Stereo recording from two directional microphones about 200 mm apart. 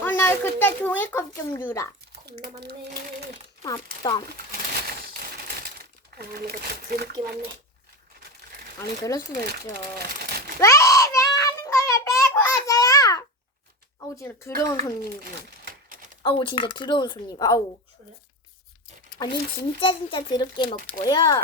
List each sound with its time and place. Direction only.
0.0 s a child's voice: 10° left (ahead or behind)
2.2 s a child's voice: 55° right (ahead or behind)
4.4 s a sound: 50° right (ahead or behind)
6.1 s speech: 50° right (ahead or behind)
9.0 s speech: 15° left (ahead or behind)
9.5 s speech: 50° right (ahead or behind)
10.6 s child singing: 15° left (ahead or behind)
12.3 s babbling: 15° left (ahead or behind)
14.2 s speech: 15° left (ahead or behind)
15.2 s a sound: 50° right (ahead or behind)
16.2 s speech: 25° left (ahead or behind)
19.2 s speech: 20° left (ahead or behind)